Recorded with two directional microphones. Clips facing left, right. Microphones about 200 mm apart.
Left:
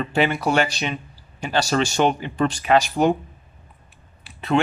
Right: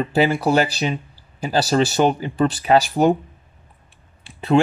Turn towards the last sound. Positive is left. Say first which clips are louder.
# right 4 dB
turn(degrees=-30)  # may be behind; listen again after turning